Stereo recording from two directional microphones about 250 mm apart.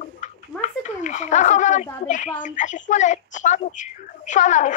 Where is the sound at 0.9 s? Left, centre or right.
Left.